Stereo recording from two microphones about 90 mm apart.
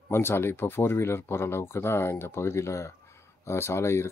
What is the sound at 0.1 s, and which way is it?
Speech, 25° left (ahead or behind).